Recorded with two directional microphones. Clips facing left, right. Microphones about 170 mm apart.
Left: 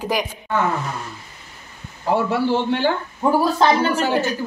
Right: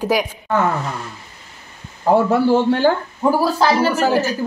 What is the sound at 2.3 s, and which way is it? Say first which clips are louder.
A man's voice: right 5 dB; 45° right (ahead or behind).